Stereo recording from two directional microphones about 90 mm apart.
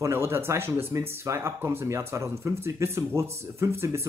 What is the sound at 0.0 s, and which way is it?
Speech, 30° right (ahead or behind).